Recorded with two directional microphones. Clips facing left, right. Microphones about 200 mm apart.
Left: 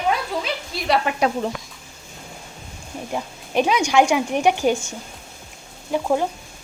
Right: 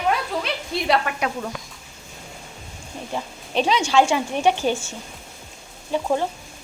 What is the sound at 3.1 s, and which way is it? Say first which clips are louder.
Speech: left 2 dB; 10° left (ahead or behind).